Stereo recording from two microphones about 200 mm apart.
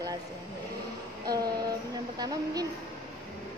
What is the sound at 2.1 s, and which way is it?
Speech, 20° right (ahead or behind).